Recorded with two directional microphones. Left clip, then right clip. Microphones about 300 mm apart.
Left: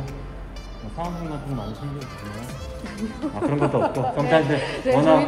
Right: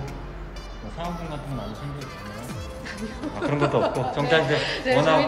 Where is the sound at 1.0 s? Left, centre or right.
Centre.